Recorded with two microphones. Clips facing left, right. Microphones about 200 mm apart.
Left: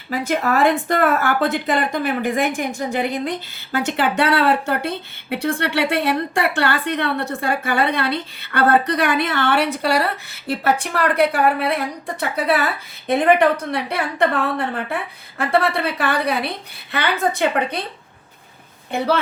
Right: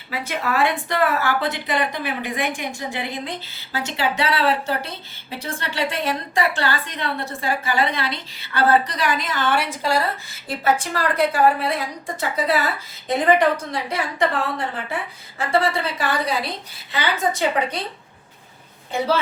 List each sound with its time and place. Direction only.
0.1 s a woman's voice: 45° left (ahead or behind)
3.7 s a woman's voice: 55° left (ahead or behind)
18.9 s a woman's voice: 60° left (ahead or behind)